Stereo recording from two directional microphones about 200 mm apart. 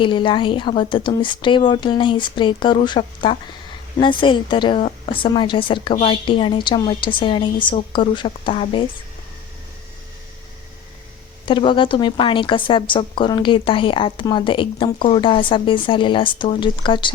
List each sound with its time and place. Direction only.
0.0 s a woman's voice: 25° left (ahead or behind)
11.4 s a woman's voice: 25° left (ahead or behind)